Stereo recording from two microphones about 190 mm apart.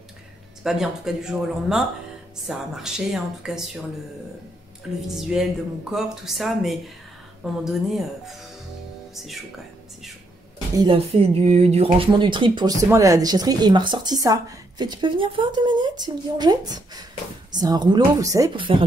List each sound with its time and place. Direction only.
0.7 s speech: centre (ahead or behind)
5.0 s speech: centre (ahead or behind)
10.8 s speech: 30° right (ahead or behind)